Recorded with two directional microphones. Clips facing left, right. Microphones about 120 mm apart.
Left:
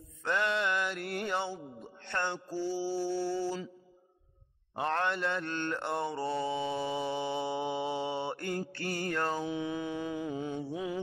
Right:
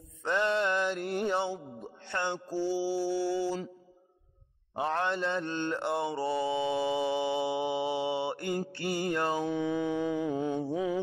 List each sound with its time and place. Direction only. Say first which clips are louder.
0.2 s music: right 2 dB; 20° right (ahead or behind)
0.5 s music: right 3 dB; 35° right (ahead or behind); by 1.6 s 15° right (ahead or behind)
2.0 s mantra: right 1 dB; 10° right (ahead or behind)
4.7 s mantra: right 1 dB; 10° right (ahead or behind)
9.5 s a sound: right 5 dB; 5° left (ahead or behind)
10.2 s mantra: right 5 dB; 55° right (ahead or behind)